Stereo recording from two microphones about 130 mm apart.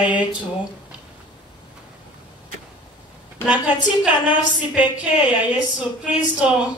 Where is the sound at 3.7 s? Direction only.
10° right (ahead or behind).